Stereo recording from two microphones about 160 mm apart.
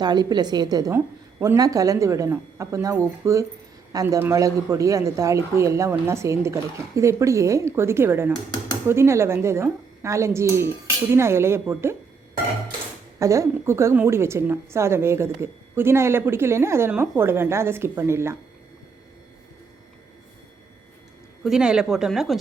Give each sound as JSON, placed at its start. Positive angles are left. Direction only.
{"t": 0.0, "sound": "a woman's voice", "side_deg": -25}
{"t": 13.1, "sound": "a woman's voice", "side_deg": -20}
{"t": 21.4, "sound": "speech", "side_deg": -5}